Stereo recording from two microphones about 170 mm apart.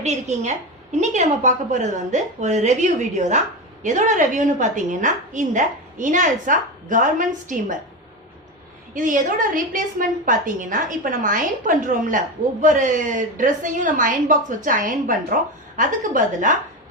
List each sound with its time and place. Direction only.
0.0 s a woman's voice: 40° right (ahead or behind)
9.0 s a woman's voice: 50° right (ahead or behind)